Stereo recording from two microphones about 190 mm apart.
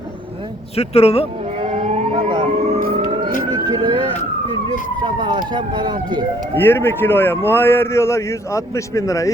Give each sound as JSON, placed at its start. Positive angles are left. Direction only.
{"t": 0.8, "sound": "speech", "side_deg": 30}
{"t": 1.7, "sound": "emergency vehicle", "side_deg": -35}
{"t": 3.5, "sound": "emergency vehicle", "side_deg": -20}
{"t": 5.0, "sound": "speech", "side_deg": -25}
{"t": 6.5, "sound": "a man's voice", "side_deg": 10}